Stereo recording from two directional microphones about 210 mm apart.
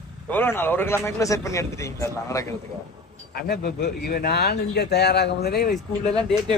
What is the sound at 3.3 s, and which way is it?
A man's voice, 45° left (ahead or behind).